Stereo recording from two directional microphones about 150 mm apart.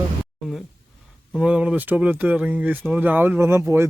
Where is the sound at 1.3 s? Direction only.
5° right (ahead or behind).